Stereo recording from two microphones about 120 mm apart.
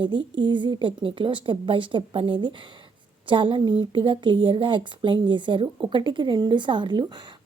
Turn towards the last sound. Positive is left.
turn(degrees=-40)  # may be behind; listen again after turning